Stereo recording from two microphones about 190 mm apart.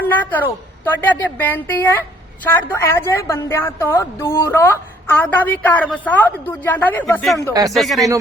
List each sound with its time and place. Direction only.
0.0 s a woman's voice: 10° left (ahead or behind)